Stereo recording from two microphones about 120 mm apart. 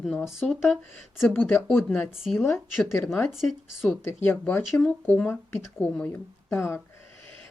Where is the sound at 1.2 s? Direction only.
15° left (ahead or behind).